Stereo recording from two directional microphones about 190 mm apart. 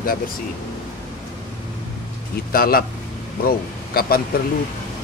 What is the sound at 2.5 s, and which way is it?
Speech, 50° left (ahead or behind).